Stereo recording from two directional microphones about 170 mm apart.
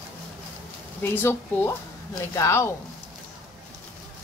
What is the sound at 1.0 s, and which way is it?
Speech, 15° left (ahead or behind).